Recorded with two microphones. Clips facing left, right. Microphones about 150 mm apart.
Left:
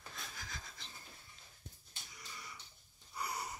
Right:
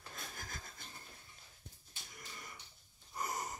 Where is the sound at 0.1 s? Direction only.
50° right (ahead or behind).